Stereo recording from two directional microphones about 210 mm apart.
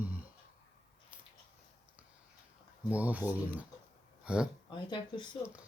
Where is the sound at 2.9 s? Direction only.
5° right (ahead or behind).